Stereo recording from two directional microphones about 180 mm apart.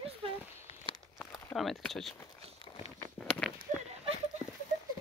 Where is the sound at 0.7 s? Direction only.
30° left (ahead or behind).